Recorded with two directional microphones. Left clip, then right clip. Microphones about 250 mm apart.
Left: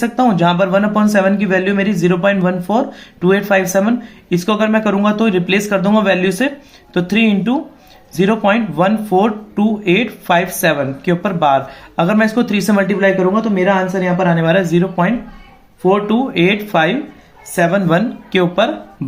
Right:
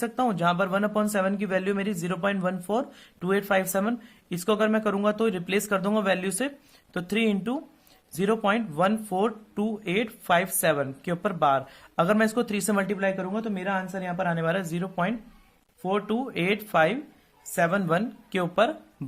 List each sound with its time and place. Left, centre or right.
0.0 s speech: right